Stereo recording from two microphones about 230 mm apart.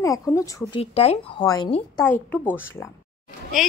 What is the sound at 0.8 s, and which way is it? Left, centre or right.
Speech, left.